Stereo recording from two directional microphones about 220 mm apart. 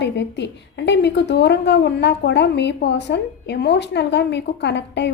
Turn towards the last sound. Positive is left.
turn(degrees=50)  # may be behind; listen again after turning